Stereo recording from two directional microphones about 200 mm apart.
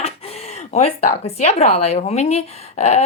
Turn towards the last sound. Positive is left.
turn(degrees=35)  # may be behind; listen again after turning